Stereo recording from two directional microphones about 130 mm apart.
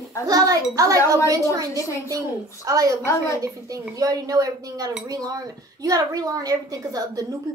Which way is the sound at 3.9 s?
30° right (ahead or behind).